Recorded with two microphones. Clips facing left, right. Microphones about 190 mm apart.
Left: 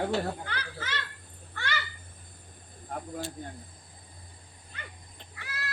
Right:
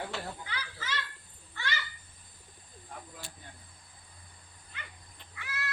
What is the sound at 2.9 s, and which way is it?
Speech, 50° left (ahead or behind).